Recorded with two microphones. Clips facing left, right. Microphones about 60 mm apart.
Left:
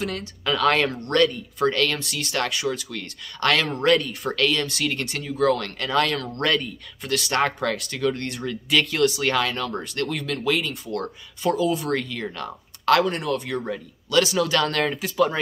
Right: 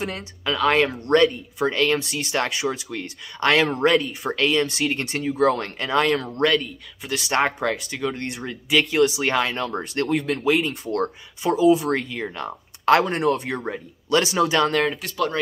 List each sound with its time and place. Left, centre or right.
0.0 s speech: right
0.5 s speech: centre
6.4 s speech: centre
7.1 s speech: centre
14.6 s speech: centre
14.9 s speech: centre